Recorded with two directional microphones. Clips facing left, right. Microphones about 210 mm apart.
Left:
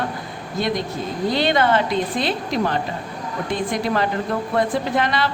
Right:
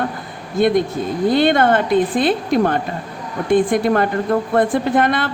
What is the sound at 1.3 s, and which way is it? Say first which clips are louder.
A woman's voice: right 4 dB; 55° right (ahead or behind).